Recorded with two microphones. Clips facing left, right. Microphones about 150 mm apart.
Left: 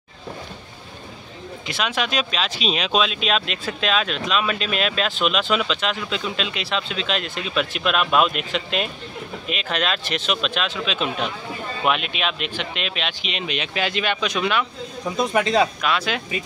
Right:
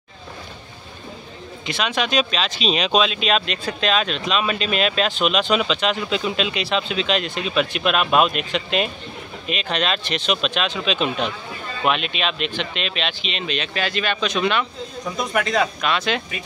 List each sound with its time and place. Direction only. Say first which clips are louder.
1.7 s speech: right 2 dB; 5° left (ahead or behind)
15.1 s speech: left 2 dB; 30° left (ahead or behind)
15.8 s speech: right 1 dB; 5° left (ahead or behind)